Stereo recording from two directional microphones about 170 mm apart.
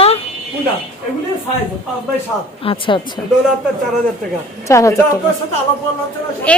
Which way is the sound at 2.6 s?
30° left (ahead or behind).